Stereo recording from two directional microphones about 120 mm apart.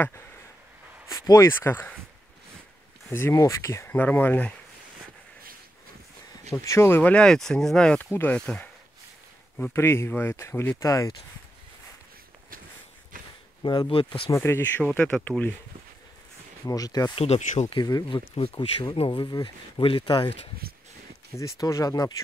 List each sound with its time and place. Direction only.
1.0 s speech: 30° left (ahead or behind)
1.5 s speech: 20° left (ahead or behind)
3.1 s speech: 20° left (ahead or behind)
6.5 s speech: 25° left (ahead or behind); by 8.6 s 10° left (ahead or behind)
9.6 s speech: 20° left (ahead or behind)
10.9 s speech: 30° left (ahead or behind)
13.6 s speech: 40° left (ahead or behind)
14.3 s speech: 20° left (ahead or behind)
14.8 s speech: 10° left (ahead or behind)
16.6 s speech: 30° left (ahead or behind)
17.1 s speech: 60° left (ahead or behind)
17.7 s speech: 35° left (ahead or behind)
18.3 s speech: 50° left (ahead or behind)
21.4 s speech: 25° left (ahead or behind)